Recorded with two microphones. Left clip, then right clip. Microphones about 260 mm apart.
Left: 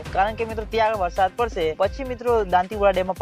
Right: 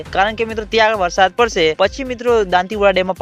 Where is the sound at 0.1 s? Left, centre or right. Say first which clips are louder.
Right 6 dB; right.